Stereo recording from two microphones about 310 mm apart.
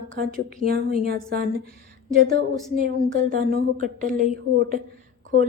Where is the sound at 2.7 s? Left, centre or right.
Right.